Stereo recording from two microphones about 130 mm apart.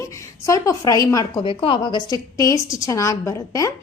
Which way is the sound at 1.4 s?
40° left (ahead or behind).